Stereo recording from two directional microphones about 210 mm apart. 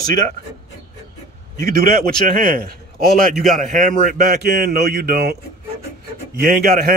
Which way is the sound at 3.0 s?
Centre (ahead or behind).